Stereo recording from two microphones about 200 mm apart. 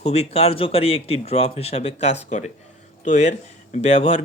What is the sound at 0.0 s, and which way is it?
Speech, 30° left (ahead or behind).